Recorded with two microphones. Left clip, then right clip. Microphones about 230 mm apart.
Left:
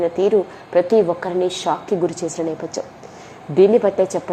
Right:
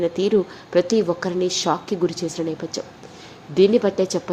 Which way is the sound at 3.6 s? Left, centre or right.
Centre.